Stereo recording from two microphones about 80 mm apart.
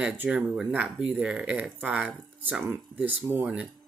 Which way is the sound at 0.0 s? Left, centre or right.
Centre.